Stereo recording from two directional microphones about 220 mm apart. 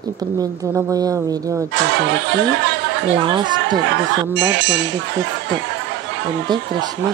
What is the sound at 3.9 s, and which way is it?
Speech, 55° right (ahead or behind).